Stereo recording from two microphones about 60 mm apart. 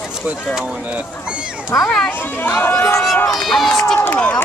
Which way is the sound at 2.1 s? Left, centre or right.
Left.